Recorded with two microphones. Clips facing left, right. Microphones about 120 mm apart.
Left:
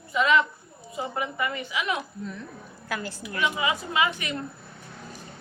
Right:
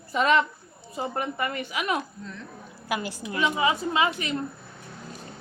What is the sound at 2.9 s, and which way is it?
Speech, 15° right (ahead or behind).